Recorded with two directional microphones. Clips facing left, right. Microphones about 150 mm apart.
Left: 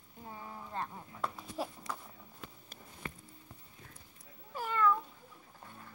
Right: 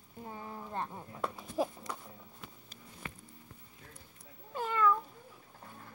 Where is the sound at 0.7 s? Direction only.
15° right (ahead or behind).